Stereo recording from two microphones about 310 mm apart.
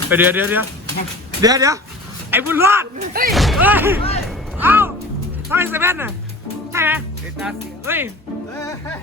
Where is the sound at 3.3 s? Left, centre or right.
Centre.